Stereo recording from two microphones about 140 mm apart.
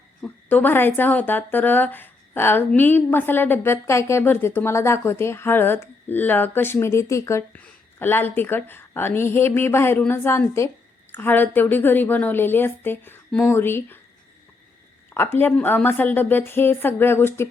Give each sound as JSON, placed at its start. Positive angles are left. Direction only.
{"t": 0.2, "sound": "speech", "side_deg": 10}
{"t": 15.1, "sound": "speech", "side_deg": 15}